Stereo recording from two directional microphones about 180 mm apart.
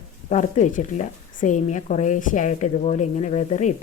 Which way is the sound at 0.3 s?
40° left (ahead or behind).